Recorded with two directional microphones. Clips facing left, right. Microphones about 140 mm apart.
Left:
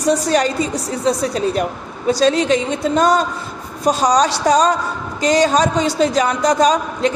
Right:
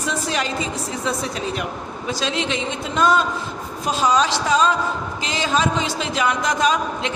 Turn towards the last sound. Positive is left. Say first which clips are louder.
# left 5 dB
turn(degrees=35)  # may be behind; listen again after turning